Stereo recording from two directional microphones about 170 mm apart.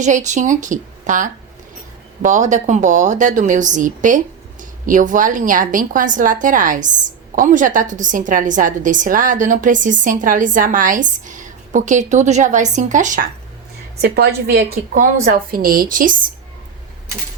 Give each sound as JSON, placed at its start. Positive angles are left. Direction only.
{"t": 0.0, "sound": "a woman's voice", "side_deg": -45}
{"t": 14.0, "sound": "a woman's voice", "side_deg": -70}